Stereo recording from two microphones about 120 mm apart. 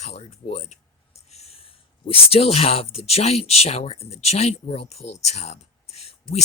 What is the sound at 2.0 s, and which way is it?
Speech, 55° left (ahead or behind).